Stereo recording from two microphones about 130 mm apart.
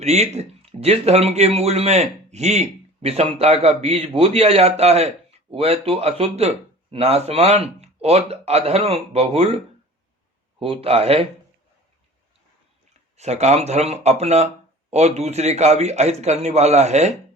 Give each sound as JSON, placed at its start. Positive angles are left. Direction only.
{"t": 0.0, "sound": "a man's voice", "side_deg": -55}
{"t": 10.6, "sound": "a man's voice", "side_deg": -50}
{"t": 13.1, "sound": "speech", "side_deg": -60}